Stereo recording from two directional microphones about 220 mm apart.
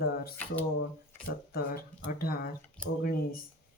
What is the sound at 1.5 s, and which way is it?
Speech, 45° left (ahead or behind).